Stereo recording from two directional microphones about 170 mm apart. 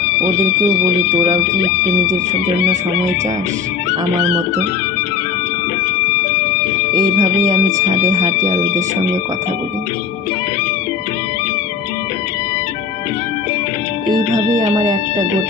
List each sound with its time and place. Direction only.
0.2 s speech: 15° right (ahead or behind)
7.2 s speech: 15° right (ahead or behind)
14.7 s speech: 25° right (ahead or behind)